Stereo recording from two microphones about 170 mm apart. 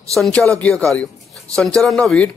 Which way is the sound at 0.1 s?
Centre (ahead or behind).